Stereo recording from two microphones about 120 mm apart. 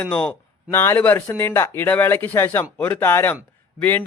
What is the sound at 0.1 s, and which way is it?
Speech, 10° left (ahead or behind).